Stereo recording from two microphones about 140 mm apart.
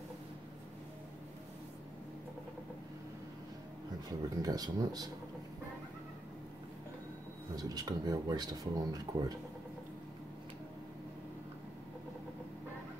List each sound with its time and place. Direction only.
4.4 s speech: 25° right (ahead or behind)
7.5 s speech: 25° right (ahead or behind)